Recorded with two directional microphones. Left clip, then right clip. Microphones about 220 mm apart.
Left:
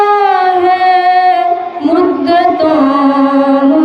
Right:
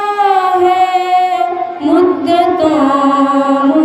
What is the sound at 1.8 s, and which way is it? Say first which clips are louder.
Music: right 1 dB; 30° right (ahead or behind).